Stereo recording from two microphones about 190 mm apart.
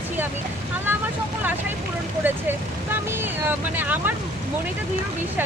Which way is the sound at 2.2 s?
10° right (ahead or behind).